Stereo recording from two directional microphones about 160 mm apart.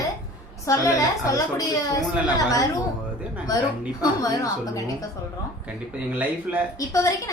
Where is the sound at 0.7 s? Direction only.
20° left (ahead or behind).